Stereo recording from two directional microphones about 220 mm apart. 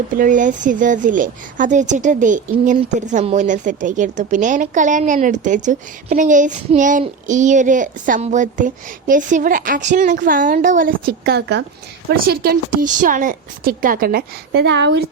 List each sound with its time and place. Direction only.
0.1 s speech: 35° right (ahead or behind); by 15.0 s 55° right (ahead or behind)